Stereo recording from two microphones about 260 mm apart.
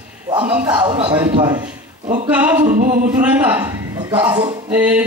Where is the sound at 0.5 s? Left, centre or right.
Centre.